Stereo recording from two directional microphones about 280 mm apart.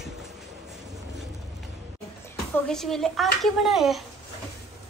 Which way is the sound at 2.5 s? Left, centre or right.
Centre.